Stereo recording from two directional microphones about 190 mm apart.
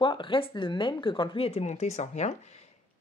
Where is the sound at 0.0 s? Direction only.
25° left (ahead or behind).